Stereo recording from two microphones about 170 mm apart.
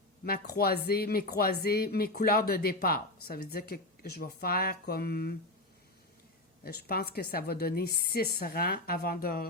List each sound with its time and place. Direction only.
0.3 s speech: 60° left (ahead or behind)
6.7 s speech: 65° left (ahead or behind)